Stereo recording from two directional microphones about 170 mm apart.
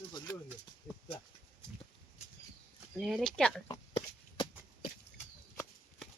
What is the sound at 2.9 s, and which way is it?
Speech, centre (ahead or behind).